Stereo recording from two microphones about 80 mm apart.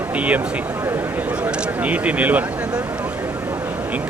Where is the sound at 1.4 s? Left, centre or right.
Centre.